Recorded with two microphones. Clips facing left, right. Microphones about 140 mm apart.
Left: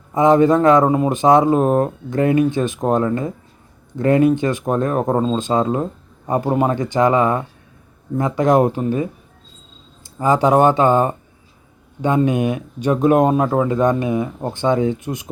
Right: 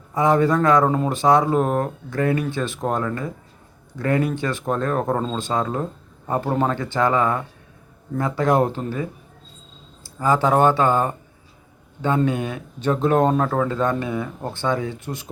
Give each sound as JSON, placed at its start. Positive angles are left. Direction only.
{"t": 0.1, "sound": "speech", "side_deg": 20}